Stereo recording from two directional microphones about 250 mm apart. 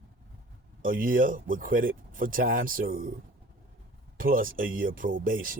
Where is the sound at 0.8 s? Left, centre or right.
Right.